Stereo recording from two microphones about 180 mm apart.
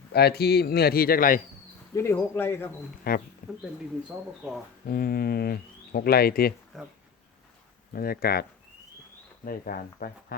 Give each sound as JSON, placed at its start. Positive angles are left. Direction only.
{"t": 0.1, "sound": "speech", "side_deg": 65}
{"t": 2.0, "sound": "speech", "side_deg": 15}
{"t": 3.1, "sound": "speech", "side_deg": 55}
{"t": 4.9, "sound": "speech", "side_deg": 55}
{"t": 6.7, "sound": "speech", "side_deg": 0}
{"t": 7.9, "sound": "speech", "side_deg": 55}